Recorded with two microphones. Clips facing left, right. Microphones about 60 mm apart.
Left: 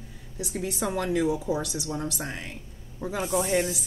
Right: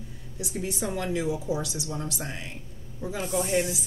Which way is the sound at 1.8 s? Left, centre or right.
Left.